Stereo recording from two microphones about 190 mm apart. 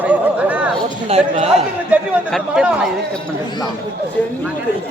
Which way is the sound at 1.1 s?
35° right (ahead or behind).